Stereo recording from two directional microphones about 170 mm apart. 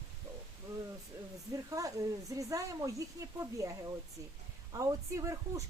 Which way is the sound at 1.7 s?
20° right (ahead or behind).